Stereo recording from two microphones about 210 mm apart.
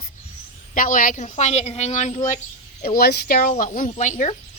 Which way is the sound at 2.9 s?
45° left (ahead or behind).